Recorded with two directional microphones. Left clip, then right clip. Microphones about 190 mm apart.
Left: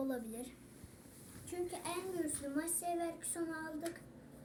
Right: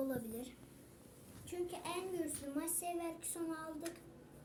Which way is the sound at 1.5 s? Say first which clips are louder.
Left 1 dB; 5° right (ahead or behind).